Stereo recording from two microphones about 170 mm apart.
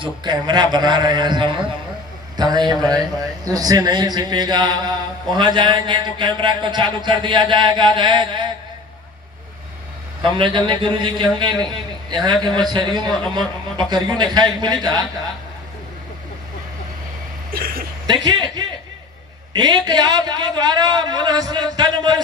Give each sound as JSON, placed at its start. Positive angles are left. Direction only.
{"t": 0.0, "sound": "a man's voice", "side_deg": -25}
{"t": 10.2, "sound": "a man's voice", "side_deg": -30}
{"t": 12.5, "sound": "a man's voice", "side_deg": -25}
{"t": 17.5, "sound": "vehicle", "side_deg": -60}
{"t": 18.0, "sound": "a man's voice", "side_deg": -25}
{"t": 19.5, "sound": "a man's voice", "side_deg": -25}